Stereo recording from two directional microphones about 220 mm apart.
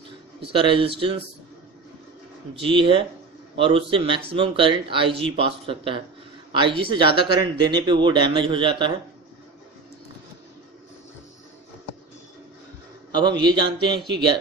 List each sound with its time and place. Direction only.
0.4 s speech: 25° right (ahead or behind)
2.6 s speech: 25° right (ahead or behind)
13.1 s a man's voice: 20° right (ahead or behind)